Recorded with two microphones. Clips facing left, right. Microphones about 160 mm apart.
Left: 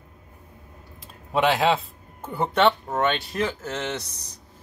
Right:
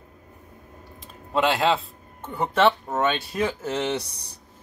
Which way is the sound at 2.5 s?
5° right (ahead or behind).